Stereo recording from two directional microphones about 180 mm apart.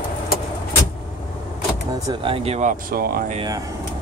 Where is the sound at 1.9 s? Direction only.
30° right (ahead or behind); by 3.4 s 55° right (ahead or behind).